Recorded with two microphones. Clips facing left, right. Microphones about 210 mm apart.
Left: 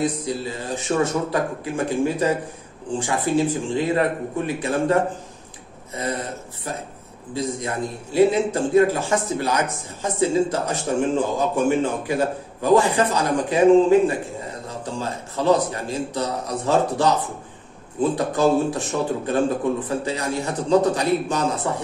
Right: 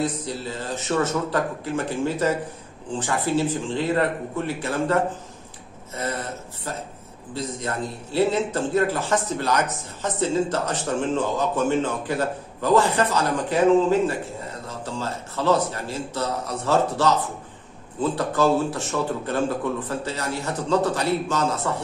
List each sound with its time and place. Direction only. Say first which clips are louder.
0.0 s a man's voice: left 3 dB; 15° left (ahead or behind)
5.9 s a man's voice: left 2 dB; 15° left (ahead or behind)
18.1 s a man's voice: left 1 dB; 15° left (ahead or behind)